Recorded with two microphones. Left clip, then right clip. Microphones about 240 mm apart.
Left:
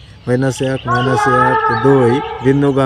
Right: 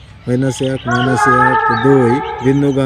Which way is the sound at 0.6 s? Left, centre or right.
Left.